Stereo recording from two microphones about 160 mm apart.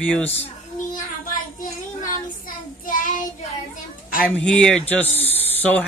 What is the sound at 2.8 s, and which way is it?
Child singing, 55° left (ahead or behind).